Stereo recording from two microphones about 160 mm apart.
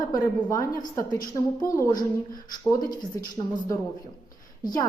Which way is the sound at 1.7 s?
20° left (ahead or behind).